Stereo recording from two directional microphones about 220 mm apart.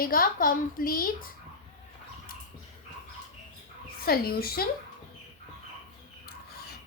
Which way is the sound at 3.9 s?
45° left (ahead or behind).